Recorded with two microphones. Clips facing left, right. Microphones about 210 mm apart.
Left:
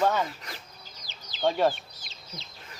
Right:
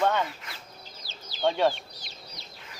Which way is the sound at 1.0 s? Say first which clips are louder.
Even; 15° left (ahead or behind).